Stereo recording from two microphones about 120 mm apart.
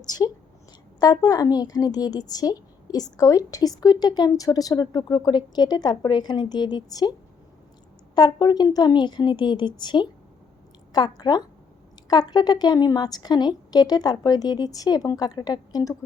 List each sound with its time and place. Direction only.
0.9 s a woman's voice: 35° left (ahead or behind)
8.1 s a woman's voice: 35° left (ahead or behind)